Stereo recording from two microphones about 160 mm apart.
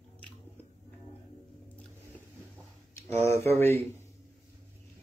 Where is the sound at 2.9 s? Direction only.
15° left (ahead or behind).